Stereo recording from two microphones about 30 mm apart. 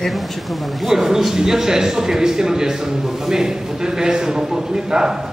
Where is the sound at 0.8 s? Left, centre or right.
Centre.